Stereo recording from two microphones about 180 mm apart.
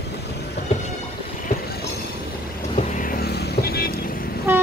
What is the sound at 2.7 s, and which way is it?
Vehicle, 40° left (ahead or behind).